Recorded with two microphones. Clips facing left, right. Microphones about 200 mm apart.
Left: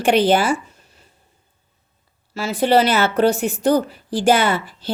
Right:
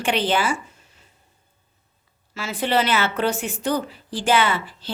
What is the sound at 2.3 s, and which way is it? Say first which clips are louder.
A woman's voice: left 6 dB; 35° left (ahead or behind).